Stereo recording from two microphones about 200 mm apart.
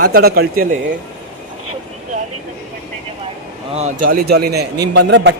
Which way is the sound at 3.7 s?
40° right (ahead or behind).